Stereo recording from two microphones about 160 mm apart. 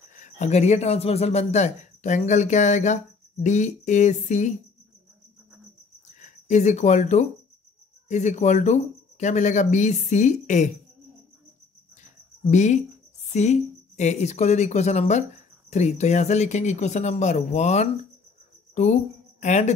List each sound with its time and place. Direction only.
0.2 s speech: 45° left (ahead or behind)
6.1 s speech: 50° left (ahead or behind)
12.4 s a woman's voice: 50° left (ahead or behind)